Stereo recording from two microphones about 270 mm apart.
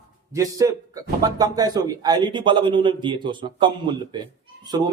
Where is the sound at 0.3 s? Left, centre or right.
Centre.